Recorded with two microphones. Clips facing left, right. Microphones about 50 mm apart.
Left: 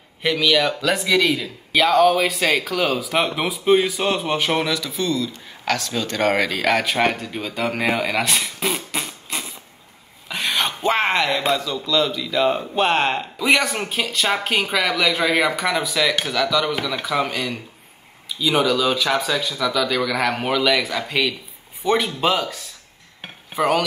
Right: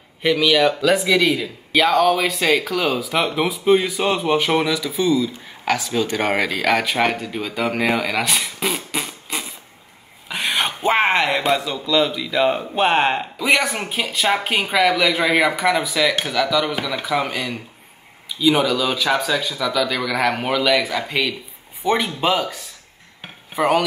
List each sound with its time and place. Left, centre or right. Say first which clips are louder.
0.2 s a man's voice: right 3 dB; centre